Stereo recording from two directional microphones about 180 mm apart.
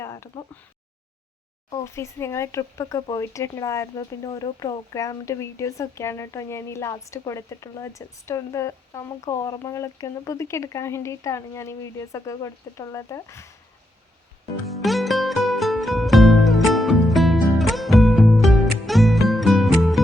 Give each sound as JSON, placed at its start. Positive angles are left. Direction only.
{"t": 0.0, "sound": "a sound", "side_deg": 15}
{"t": 1.7, "sound": "speech", "side_deg": 15}
{"t": 14.7, "sound": "music", "side_deg": 0}